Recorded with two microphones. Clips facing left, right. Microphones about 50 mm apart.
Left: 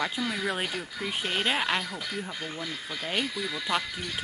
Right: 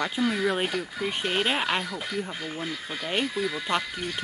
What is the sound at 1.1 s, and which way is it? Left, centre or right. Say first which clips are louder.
Speech: right 2 dB; centre.